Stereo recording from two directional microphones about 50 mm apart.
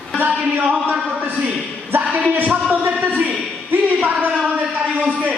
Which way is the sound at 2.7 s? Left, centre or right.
Right.